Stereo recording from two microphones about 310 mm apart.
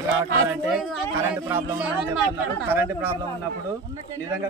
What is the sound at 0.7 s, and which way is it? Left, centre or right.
Speech, centre.